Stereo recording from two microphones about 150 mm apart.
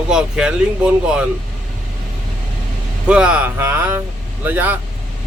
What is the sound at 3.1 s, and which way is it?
A man's voice, 5° right (ahead or behind).